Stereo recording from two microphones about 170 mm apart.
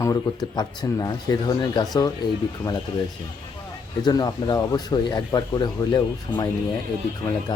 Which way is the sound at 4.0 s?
25° left (ahead or behind).